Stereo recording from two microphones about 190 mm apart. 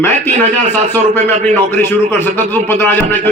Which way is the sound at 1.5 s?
10° left (ahead or behind).